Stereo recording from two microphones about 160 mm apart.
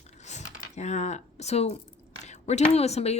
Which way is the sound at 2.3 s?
45° left (ahead or behind).